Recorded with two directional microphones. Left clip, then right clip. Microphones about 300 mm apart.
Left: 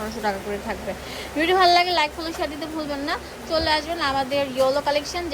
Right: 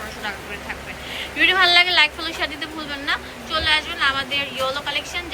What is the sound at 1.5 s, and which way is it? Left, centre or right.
Speech, centre.